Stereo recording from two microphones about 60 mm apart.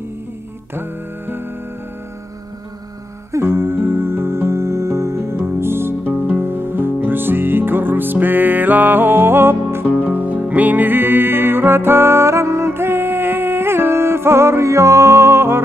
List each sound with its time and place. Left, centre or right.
0.7 s music: right
3.3 s music: right
9.8 s music: right